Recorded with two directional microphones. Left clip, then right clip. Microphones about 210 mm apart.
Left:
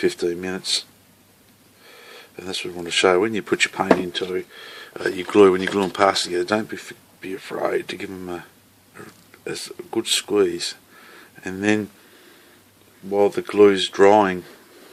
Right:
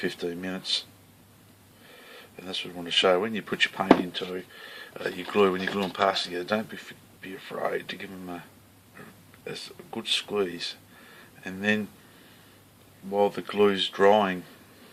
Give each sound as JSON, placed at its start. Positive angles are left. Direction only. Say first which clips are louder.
{"t": 0.0, "sound": "speech", "louder": "left 9 dB", "side_deg": 40}
{"t": 2.0, "sound": "speech", "louder": "left 6 dB", "side_deg": 40}
{"t": 9.5, "sound": "speech", "louder": "left 8 dB", "side_deg": 45}
{"t": 13.1, "sound": "speech", "louder": "left 7 dB", "side_deg": 40}